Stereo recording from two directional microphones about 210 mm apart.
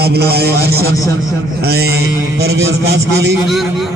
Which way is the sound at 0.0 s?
50° right (ahead or behind).